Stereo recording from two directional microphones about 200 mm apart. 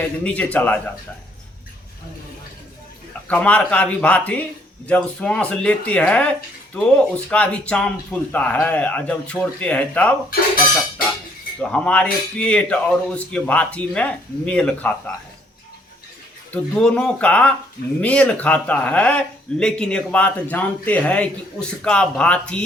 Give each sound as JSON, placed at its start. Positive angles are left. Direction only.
{"t": 0.0, "sound": "a man's voice", "side_deg": 5}
{"t": 3.2, "sound": "a man's voice", "side_deg": 5}
{"t": 10.2, "sound": "speech", "side_deg": 45}
{"t": 11.7, "sound": "a man's voice", "side_deg": 5}
{"t": 16.5, "sound": "a man's voice", "side_deg": 5}